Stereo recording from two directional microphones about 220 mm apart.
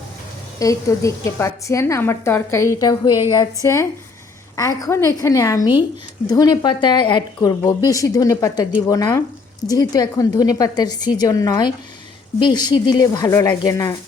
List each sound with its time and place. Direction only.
0.6 s a woman's voice: 15° left (ahead or behind)